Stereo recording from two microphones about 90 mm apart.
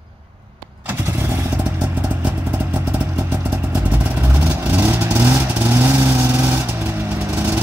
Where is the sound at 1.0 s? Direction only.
30° right (ahead or behind).